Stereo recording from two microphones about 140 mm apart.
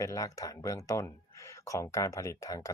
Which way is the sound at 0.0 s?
25° left (ahead or behind).